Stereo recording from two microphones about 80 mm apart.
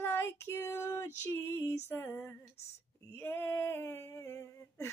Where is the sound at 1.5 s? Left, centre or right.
Left.